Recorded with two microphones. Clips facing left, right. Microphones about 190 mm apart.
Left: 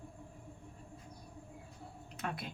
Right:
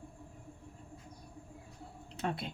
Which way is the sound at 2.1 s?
30° right (ahead or behind).